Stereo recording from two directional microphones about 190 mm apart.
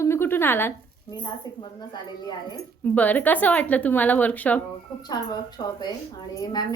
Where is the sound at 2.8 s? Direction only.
10° left (ahead or behind).